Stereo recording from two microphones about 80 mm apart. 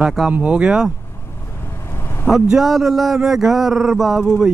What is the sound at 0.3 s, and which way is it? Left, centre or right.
Speech, centre.